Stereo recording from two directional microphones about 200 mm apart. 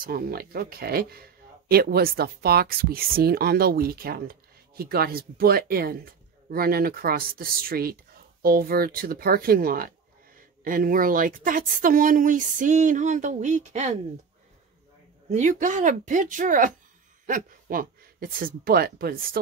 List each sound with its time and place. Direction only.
0.0 s speech: 45° right (ahead or behind)
15.2 s speech: 35° right (ahead or behind)